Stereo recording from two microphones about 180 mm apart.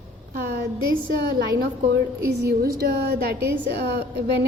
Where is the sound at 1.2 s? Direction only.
65° right (ahead or behind).